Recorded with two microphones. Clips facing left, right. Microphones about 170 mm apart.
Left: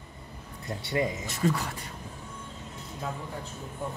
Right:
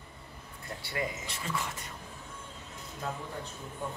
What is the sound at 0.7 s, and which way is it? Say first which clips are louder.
Speech: left 8 dB; 20° left (ahead or behind).